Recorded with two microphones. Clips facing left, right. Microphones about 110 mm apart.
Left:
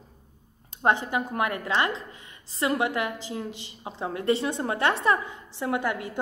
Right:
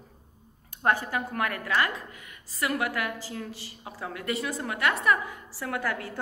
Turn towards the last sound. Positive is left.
turn(degrees=20)  # may be behind; listen again after turning